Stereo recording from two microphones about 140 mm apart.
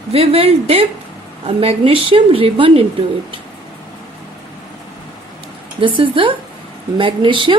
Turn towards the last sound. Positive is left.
turn(degrees=-40)  # may be behind; listen again after turning